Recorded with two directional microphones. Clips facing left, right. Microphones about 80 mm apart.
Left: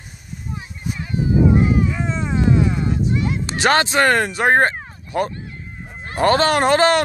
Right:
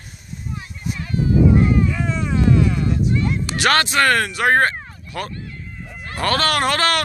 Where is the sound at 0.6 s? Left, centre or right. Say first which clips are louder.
Left 1 dB; centre.